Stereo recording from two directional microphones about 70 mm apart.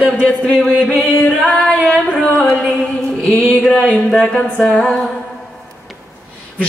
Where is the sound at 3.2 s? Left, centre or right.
Centre.